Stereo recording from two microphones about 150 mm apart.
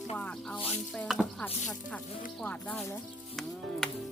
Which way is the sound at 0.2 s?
10° left (ahead or behind).